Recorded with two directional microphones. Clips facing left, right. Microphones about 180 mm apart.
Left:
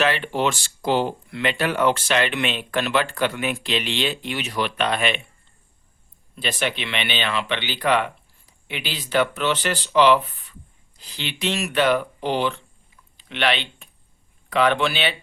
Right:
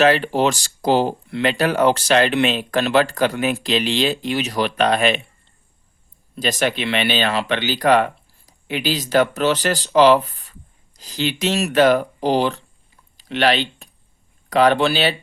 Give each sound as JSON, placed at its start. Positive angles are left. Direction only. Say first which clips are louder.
{"t": 0.0, "sound": "speech", "louder": "right 6 dB", "side_deg": -40}
{"t": 6.3, "sound": "speech", "louder": "right 5 dB", "side_deg": -40}
{"t": 13.1, "sound": "a sound", "louder": "right 5 dB", "side_deg": -40}
{"t": 14.5, "sound": "speech", "louder": "right 5 dB", "side_deg": -40}